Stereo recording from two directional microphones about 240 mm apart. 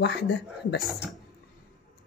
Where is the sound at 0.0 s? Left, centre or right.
Left.